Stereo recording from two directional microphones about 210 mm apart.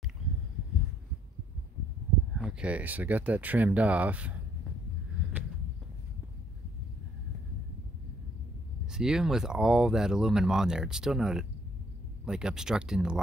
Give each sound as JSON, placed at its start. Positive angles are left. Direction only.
{"t": 2.3, "sound": "speech", "side_deg": -5}
{"t": 8.9, "sound": "speech", "side_deg": -5}